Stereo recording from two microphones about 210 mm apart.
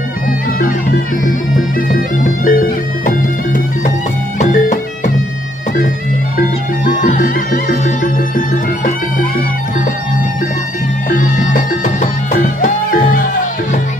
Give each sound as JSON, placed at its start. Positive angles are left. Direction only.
{"t": 1.9, "sound": "music", "side_deg": 40}
{"t": 6.9, "sound": "music", "side_deg": 40}
{"t": 11.1, "sound": "music", "side_deg": 40}